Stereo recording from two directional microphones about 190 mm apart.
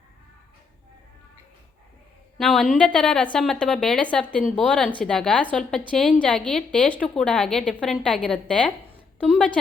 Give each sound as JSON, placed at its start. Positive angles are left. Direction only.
{"t": 2.4, "sound": "a woman's voice", "side_deg": 0}